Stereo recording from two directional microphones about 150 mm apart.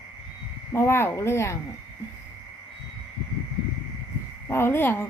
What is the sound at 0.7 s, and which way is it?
Speech, 15° left (ahead or behind).